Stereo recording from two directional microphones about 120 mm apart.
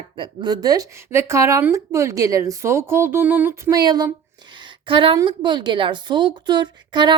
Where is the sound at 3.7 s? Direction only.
35° right (ahead or behind).